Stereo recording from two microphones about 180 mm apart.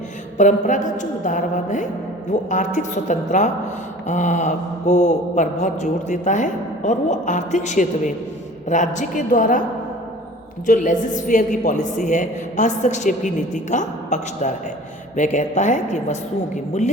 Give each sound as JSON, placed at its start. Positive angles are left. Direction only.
{"t": 0.3, "sound": "a woman's voice", "side_deg": 45}
{"t": 10.7, "sound": "a woman's voice", "side_deg": 45}